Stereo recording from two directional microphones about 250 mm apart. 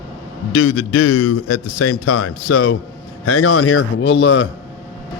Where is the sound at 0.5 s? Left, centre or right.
Left.